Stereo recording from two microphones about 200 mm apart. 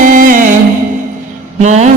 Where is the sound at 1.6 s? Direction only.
35° right (ahead or behind).